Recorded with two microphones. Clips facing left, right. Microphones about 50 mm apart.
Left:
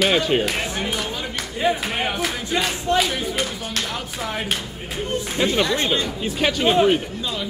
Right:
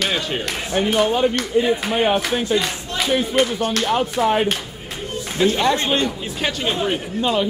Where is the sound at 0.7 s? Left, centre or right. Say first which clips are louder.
Right 8 dB; right.